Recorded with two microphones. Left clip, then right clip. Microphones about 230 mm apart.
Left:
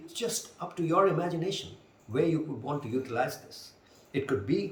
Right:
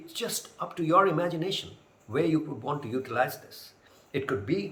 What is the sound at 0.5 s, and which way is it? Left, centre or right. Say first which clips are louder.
Speech: right 4 dB; centre.